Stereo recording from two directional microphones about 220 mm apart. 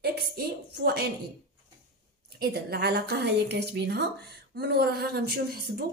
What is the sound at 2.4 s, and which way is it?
A woman's voice, 45° right (ahead or behind).